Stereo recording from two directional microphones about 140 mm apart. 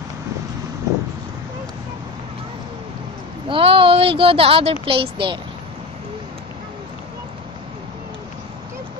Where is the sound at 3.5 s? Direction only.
40° right (ahead or behind).